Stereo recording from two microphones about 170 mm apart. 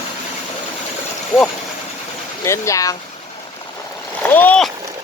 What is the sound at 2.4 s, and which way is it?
Speech, 20° left (ahead or behind).